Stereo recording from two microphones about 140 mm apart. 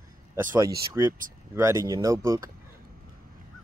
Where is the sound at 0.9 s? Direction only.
20° right (ahead or behind).